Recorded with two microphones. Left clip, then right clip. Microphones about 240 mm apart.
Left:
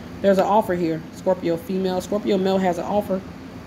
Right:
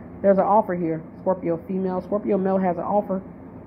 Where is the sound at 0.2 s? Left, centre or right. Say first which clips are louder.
Even; centre.